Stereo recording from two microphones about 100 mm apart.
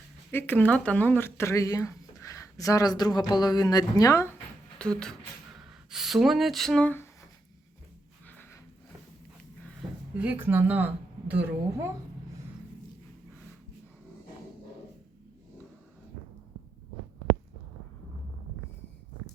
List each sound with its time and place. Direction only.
0.3 s speech: 20° left (ahead or behind)
4.8 s speech: 10° left (ahead or behind)
5.9 s speech: 5° right (ahead or behind)
6.8 s speech: 20° left (ahead or behind)
10.2 s a woman's voice: 20° right (ahead or behind)